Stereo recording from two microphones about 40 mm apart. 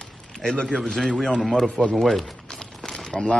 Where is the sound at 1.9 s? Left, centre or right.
Centre.